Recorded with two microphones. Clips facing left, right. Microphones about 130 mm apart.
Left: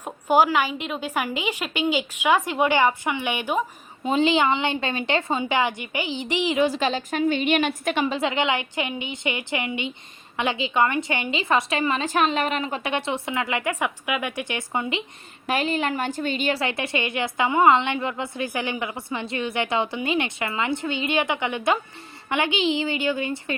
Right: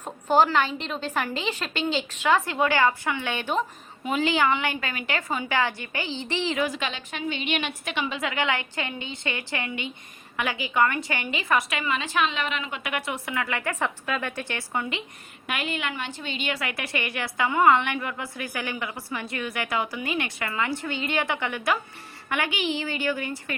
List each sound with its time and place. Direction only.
0.0 s a woman's voice: 10° left (ahead or behind)
4.0 s a woman's voice: 25° left (ahead or behind)
6.7 s a woman's voice: 35° left (ahead or behind)
11.8 s a woman's voice: 40° left (ahead or behind); by 15.0 s 20° left (ahead or behind)
15.4 s a woman's voice: 35° left (ahead or behind)